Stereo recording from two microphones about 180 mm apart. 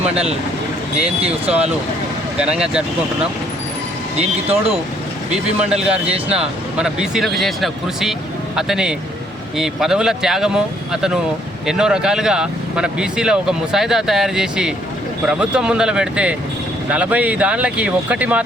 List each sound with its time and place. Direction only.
1.2 s speech: 35° right (ahead or behind)
2.4 s speech: 5° right (ahead or behind)
4.2 s speech: 35° right (ahead or behind)
5.6 s speech: 5° right (ahead or behind)